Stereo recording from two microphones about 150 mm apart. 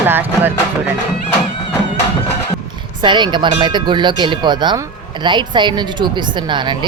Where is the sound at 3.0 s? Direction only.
30° right (ahead or behind).